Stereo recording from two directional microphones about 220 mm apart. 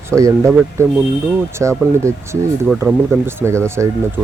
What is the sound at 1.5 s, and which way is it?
Speech, 15° right (ahead or behind).